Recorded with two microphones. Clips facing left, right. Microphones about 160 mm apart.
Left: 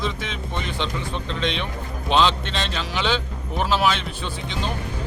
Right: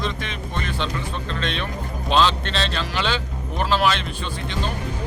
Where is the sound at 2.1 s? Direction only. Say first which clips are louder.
Even; 15° left (ahead or behind).